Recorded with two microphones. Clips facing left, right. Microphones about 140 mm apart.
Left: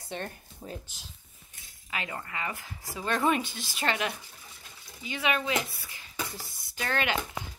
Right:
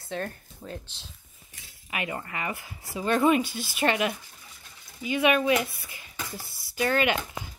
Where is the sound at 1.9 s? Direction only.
15° right (ahead or behind).